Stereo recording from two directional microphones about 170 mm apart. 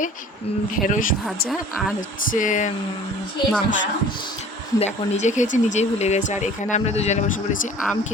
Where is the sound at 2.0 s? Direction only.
50° left (ahead or behind).